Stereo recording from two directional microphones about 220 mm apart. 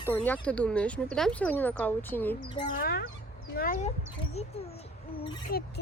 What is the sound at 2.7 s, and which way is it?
A child's voice, 45° left (ahead or behind).